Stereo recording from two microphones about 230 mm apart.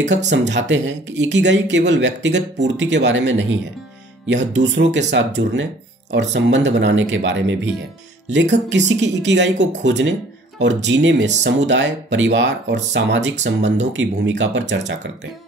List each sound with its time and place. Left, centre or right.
0.3 s speech: right